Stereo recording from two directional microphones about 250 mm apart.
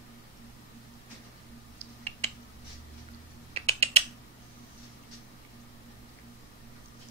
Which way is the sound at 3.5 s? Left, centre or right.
Right.